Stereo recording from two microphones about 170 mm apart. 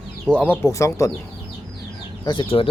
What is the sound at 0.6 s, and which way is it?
Speech, 15° left (ahead or behind).